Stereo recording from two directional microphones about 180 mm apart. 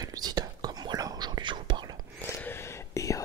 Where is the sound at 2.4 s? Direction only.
15° left (ahead or behind).